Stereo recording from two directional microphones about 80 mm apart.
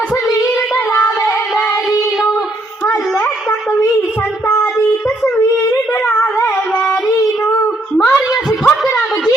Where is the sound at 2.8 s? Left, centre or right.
Centre.